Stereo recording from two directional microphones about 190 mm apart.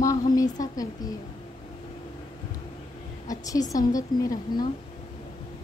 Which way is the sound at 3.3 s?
20° left (ahead or behind).